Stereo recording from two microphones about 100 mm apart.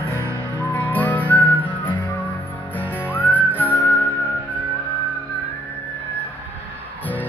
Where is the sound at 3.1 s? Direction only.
20° left (ahead or behind).